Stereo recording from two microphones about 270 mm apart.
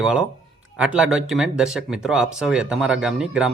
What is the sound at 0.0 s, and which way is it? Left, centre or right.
Speech, centre.